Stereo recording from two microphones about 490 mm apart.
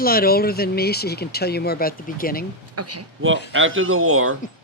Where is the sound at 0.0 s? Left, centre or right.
Centre.